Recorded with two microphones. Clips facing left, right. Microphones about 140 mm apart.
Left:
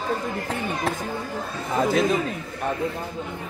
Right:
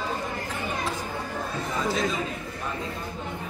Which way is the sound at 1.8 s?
55° left (ahead or behind).